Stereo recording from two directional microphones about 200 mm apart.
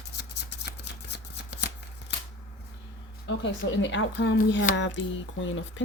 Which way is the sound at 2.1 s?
60° left (ahead or behind).